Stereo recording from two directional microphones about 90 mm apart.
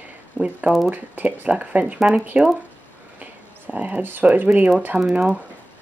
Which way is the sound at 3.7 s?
15° right (ahead or behind).